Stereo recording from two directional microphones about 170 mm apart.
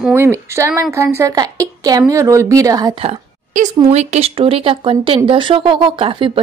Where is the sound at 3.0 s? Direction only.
40° right (ahead or behind).